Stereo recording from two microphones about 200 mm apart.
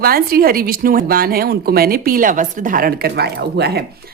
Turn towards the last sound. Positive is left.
turn(degrees=-55)  # may be behind; listen again after turning